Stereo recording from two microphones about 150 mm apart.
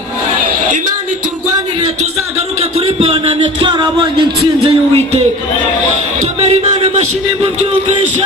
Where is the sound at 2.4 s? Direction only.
45° right (ahead or behind).